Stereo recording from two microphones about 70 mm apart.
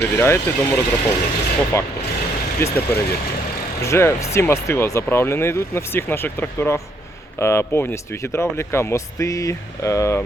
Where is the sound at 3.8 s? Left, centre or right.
Left.